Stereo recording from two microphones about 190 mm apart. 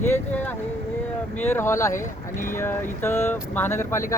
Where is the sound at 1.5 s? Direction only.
15° left (ahead or behind).